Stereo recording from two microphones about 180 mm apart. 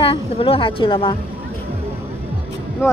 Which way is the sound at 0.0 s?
30° left (ahead or behind).